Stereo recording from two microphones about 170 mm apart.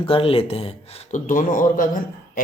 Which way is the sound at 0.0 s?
30° left (ahead or behind).